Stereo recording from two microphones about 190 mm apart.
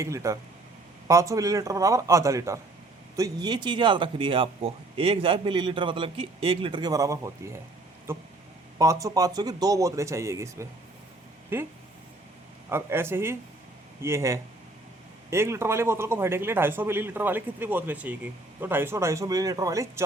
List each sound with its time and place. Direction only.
0.0 s speech: 15° right (ahead or behind)
12.7 s speech: 10° right (ahead or behind)